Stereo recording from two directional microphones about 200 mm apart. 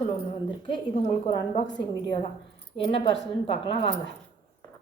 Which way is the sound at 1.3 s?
20° left (ahead or behind).